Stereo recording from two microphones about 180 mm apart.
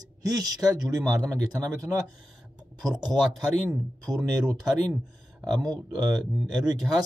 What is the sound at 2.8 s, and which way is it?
Speech, centre (ahead or behind).